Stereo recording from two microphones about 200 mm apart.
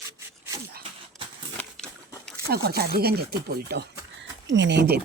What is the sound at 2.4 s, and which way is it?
Speech, 50° right (ahead or behind).